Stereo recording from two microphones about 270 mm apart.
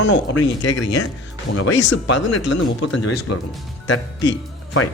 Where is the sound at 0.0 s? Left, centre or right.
Left.